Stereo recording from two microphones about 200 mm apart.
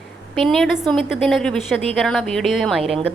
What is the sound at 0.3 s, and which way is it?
A woman's voice, centre (ahead or behind).